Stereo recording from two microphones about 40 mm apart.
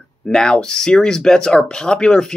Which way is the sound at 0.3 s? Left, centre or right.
Centre.